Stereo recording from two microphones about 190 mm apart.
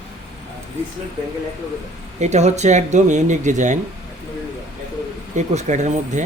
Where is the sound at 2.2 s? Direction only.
35° right (ahead or behind).